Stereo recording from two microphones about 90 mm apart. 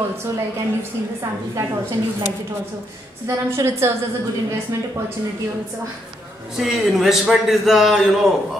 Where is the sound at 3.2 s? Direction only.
30° right (ahead or behind).